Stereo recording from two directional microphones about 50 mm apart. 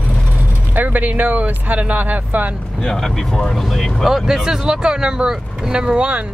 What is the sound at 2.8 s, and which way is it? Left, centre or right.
Speech, centre.